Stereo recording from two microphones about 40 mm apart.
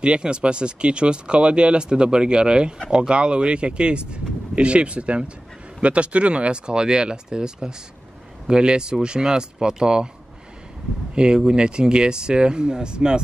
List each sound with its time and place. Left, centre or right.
0.0 s speech: right
11.4 s speech: right